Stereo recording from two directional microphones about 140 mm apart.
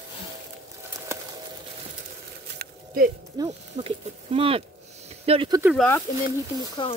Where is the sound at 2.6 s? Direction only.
90° right.